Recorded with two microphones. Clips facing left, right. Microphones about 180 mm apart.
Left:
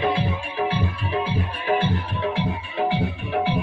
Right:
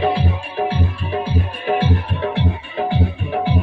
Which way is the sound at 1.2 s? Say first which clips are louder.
Right 3 dB; 55° right (ahead or behind).